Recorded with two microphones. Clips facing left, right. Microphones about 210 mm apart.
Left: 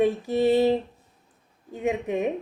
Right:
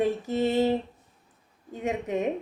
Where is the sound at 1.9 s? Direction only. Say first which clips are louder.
Left 2 dB; 20° left (ahead or behind).